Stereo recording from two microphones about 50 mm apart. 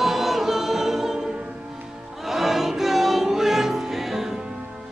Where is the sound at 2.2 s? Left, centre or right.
Centre.